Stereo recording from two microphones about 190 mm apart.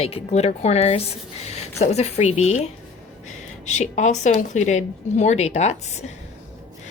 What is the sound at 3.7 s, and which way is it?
Speech, 40° left (ahead or behind).